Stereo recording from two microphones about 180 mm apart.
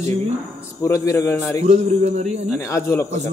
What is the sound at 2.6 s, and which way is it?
Speech, 15° left (ahead or behind).